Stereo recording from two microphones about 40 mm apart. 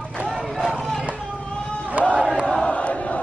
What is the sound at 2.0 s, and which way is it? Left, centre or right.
Crowd, right.